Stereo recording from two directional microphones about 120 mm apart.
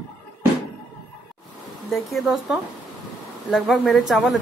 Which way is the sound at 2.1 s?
Centre (ahead or behind).